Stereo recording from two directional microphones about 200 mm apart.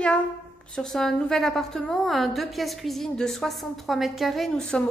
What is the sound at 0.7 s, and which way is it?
A woman's voice, 5° left (ahead or behind).